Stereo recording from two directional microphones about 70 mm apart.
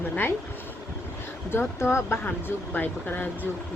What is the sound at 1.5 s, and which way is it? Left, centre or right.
Speech, left.